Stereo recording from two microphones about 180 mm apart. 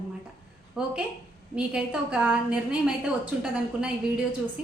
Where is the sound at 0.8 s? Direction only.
5° right (ahead or behind).